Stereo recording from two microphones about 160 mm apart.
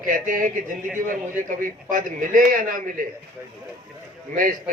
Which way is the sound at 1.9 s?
55° right (ahead or behind).